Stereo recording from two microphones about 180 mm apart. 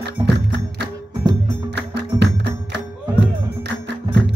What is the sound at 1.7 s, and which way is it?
Music, 70° right (ahead or behind).